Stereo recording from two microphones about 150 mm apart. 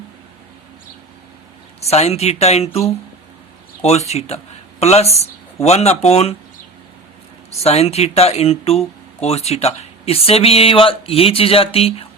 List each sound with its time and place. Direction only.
1.9 s speech: 45° left (ahead or behind)
7.5 s speech: 45° left (ahead or behind)